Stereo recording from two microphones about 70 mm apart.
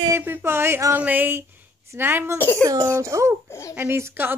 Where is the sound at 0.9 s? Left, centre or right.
Right.